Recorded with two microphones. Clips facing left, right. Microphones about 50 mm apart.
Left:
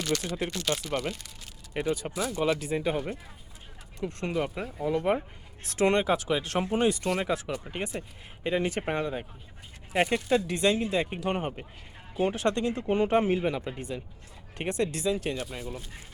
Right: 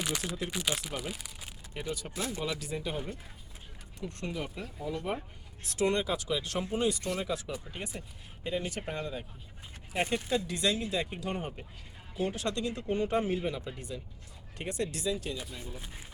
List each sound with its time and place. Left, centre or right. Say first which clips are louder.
0.0 s speech: left 5 dB; centre
1.7 s speech: left 8 dB; left
4.3 s speech: left 9 dB; left
7.1 s speech: left 5 dB; left
13.1 s speech: left 6 dB; left